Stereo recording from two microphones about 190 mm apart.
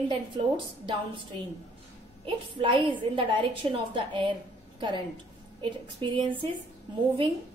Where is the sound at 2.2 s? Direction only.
25° right (ahead or behind).